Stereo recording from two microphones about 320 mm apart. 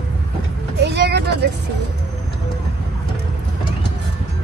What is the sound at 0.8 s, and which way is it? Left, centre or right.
Vehicle, right.